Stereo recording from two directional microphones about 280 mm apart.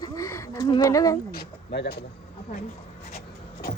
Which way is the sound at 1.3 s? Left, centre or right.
Left.